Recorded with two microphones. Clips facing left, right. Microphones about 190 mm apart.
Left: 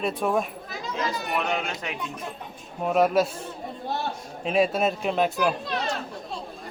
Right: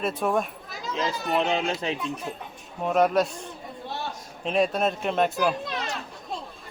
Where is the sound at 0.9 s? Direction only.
25° right (ahead or behind).